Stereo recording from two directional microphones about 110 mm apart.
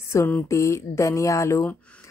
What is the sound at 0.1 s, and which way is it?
A woman's voice, 20° left (ahead or behind).